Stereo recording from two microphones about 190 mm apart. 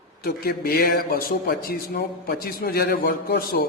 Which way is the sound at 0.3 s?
50° left (ahead or behind).